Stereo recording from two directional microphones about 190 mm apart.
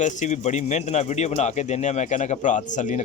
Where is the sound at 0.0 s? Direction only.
40° left (ahead or behind).